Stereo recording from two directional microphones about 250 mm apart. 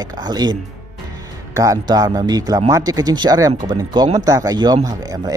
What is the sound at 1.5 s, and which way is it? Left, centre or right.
Speech, centre.